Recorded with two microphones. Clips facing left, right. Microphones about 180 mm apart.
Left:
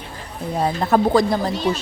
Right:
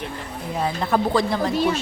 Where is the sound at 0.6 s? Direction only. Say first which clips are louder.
Left 4 dB; 45° left (ahead or behind).